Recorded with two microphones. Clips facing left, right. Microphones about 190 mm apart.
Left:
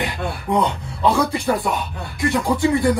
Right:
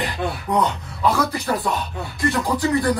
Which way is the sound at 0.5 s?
30° left (ahead or behind).